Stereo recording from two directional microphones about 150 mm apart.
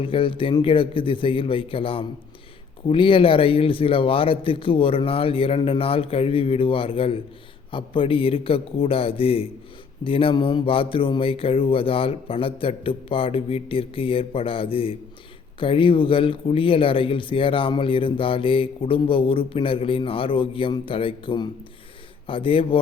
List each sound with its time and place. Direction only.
0.0 s speech: 35° left (ahead or behind)